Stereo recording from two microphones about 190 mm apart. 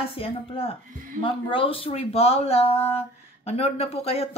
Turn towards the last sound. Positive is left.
turn(degrees=30)  # may be behind; listen again after turning